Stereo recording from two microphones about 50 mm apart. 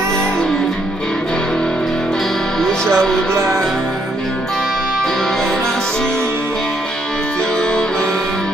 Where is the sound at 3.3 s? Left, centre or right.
Right.